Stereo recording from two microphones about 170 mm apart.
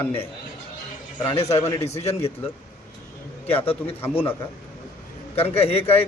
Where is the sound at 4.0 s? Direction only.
10° left (ahead or behind).